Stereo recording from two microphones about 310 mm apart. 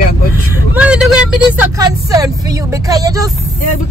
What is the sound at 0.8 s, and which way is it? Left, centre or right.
Speech, centre.